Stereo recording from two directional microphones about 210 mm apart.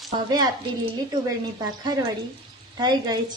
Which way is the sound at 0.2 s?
20° right (ahead or behind).